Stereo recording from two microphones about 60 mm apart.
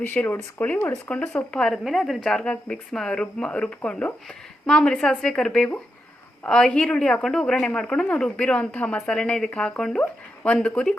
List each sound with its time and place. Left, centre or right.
0.0 s a woman's voice: left; by 1.7 s centre
1.7 s a woman's voice: centre
2.4 s a woman's voice: centre
9.0 s a woman's voice: centre